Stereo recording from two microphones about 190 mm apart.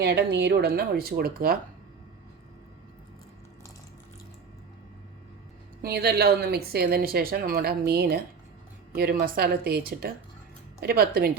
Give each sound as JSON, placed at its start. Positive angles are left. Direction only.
{"t": 0.0, "sound": "speech", "side_deg": -60}
{"t": 5.8, "sound": "a woman's voice", "side_deg": -55}